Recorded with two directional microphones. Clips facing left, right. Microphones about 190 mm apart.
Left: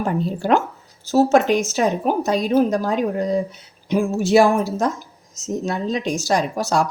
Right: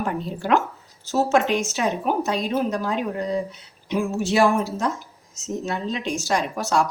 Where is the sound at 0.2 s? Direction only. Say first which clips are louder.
Left 3 dB; 35° left (ahead or behind).